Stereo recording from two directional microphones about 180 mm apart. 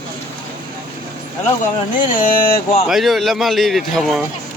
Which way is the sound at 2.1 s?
50° left (ahead or behind).